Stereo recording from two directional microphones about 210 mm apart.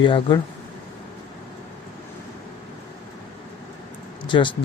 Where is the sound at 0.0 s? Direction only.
20° left (ahead or behind).